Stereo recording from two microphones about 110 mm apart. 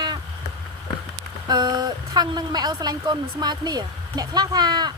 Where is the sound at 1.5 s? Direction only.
40° right (ahead or behind).